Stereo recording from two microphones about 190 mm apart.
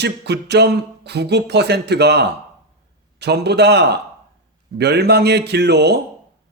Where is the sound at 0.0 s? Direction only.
60° right (ahead or behind).